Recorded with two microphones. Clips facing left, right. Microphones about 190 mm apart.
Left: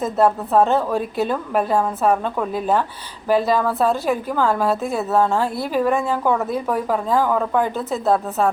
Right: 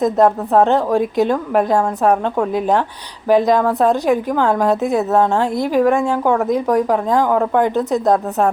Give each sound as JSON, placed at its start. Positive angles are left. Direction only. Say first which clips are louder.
{"t": 0.0, "sound": "a woman's voice", "louder": "right 4 dB", "side_deg": -15}